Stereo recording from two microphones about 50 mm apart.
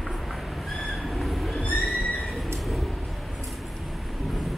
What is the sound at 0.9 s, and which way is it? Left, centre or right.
Train, centre.